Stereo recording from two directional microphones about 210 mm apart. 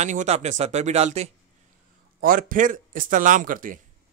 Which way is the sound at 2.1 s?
40° right (ahead or behind).